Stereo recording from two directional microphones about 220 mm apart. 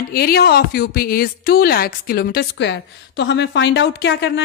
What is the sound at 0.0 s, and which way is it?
A woman's voice, 45° left (ahead or behind).